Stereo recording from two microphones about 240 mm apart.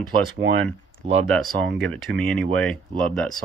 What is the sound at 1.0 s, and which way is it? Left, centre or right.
Speech, right.